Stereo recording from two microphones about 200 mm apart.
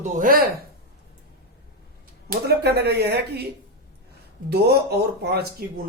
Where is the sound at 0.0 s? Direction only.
45° right (ahead or behind).